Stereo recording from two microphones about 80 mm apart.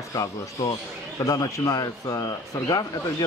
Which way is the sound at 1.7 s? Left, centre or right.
Left.